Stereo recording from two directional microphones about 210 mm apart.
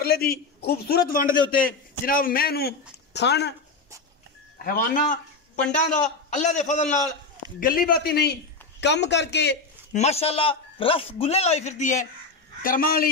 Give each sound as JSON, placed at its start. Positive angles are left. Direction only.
{"t": 0.0, "sound": "a man's voice", "side_deg": 50}
{"t": 4.6, "sound": "a man's voice", "side_deg": 40}
{"t": 9.9, "sound": "a man's voice", "side_deg": 30}